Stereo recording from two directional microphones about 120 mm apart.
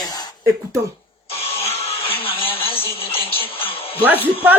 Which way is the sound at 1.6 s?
50° left (ahead or behind).